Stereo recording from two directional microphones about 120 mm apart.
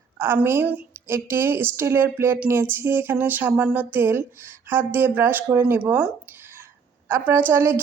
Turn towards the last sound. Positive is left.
turn(degrees=-20)  # may be behind; listen again after turning